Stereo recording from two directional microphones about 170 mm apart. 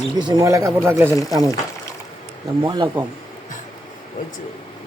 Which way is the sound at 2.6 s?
25° right (ahead or behind).